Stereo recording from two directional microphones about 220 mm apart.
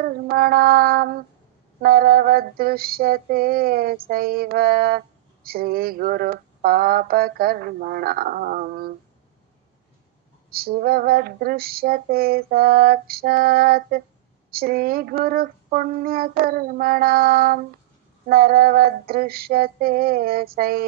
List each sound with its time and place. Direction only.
0.0 s female singing: 45° right (ahead or behind)
10.5 s female singing: 45° right (ahead or behind)